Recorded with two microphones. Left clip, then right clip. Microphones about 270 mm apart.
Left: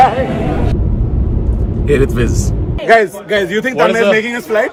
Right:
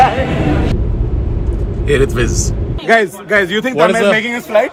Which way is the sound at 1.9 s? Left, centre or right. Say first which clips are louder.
Even; centre.